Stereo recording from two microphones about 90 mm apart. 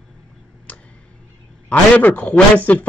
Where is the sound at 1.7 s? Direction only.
15° left (ahead or behind).